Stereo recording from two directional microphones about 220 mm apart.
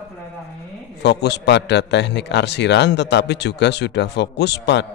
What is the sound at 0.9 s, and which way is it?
A man's voice, 50° left (ahead or behind).